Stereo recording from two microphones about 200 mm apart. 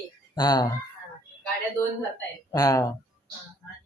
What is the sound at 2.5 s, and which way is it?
Speech, 15° left (ahead or behind).